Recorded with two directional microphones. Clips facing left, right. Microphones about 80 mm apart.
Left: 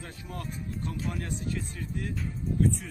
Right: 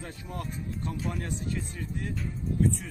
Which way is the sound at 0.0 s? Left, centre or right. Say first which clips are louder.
Right 2 dB; right.